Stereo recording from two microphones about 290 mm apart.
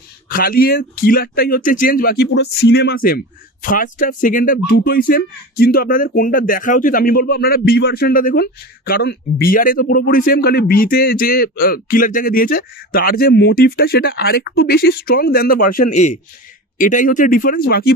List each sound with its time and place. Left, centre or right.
0.3 s speech: left